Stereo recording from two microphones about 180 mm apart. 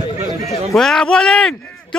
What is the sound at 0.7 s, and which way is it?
Speech, 5° left (ahead or behind).